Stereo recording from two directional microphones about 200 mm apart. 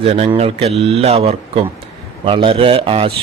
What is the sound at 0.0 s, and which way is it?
A man's voice, 30° right (ahead or behind).